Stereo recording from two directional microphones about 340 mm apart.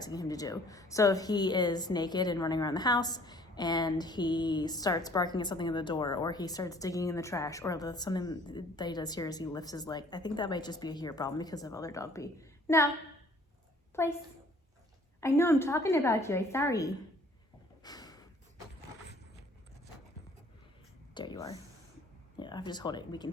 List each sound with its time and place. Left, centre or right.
0.0 s a woman's voice: centre
13.9 s a woman's voice: centre
15.2 s a woman's voice: centre
17.8 s a sound: centre
21.2 s a woman's voice: centre